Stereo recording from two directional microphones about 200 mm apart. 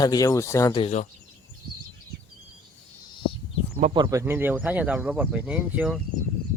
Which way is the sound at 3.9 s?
20° right (ahead or behind).